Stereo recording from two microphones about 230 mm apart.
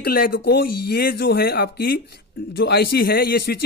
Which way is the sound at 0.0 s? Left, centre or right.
Left.